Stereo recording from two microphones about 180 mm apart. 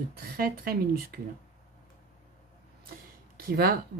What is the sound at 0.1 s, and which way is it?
Speech, 55° right (ahead or behind).